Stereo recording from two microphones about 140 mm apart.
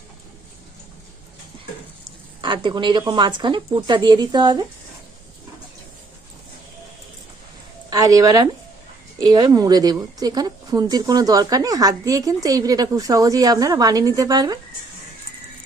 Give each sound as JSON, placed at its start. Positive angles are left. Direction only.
{"t": 2.4, "sound": "speech", "side_deg": -35}
{"t": 7.9, "sound": "a woman's voice", "side_deg": -25}